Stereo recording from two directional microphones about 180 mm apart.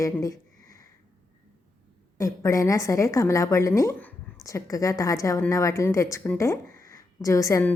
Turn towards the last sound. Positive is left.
turn(degrees=15)  # may be behind; listen again after turning